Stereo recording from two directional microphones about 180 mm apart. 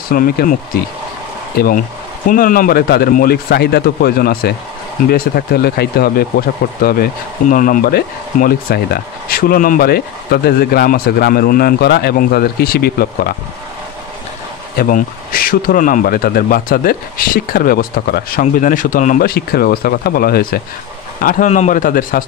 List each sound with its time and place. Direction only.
0.1 s a man's voice: 55° left (ahead or behind)
14.8 s a man's voice: 50° left (ahead or behind)